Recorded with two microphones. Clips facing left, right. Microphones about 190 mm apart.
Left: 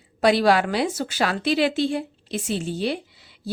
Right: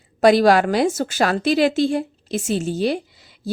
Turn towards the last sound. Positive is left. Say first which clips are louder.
# right 3 dB
turn(degrees=-45)  # may be behind; listen again after turning